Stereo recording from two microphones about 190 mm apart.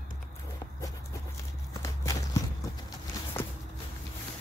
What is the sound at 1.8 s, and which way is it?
Walk, 15° left (ahead or behind).